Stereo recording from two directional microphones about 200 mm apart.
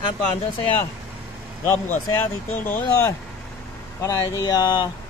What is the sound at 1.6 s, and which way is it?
Speech, 10° left (ahead or behind).